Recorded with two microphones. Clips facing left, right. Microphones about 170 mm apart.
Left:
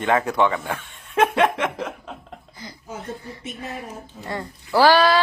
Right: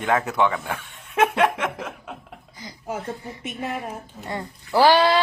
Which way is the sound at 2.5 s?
15° right (ahead or behind).